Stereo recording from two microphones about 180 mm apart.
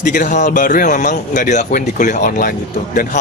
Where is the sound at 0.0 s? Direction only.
45° left (ahead or behind).